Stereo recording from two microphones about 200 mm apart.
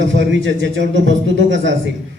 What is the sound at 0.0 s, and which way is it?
A man's voice, 65° right (ahead or behind).